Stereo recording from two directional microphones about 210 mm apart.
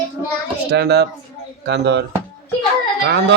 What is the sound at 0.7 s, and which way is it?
A man's voice, 50° right (ahead or behind).